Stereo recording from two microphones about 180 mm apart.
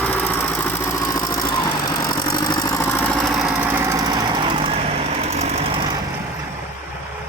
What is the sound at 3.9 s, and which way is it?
Jackhammer, 20° right (ahead or behind).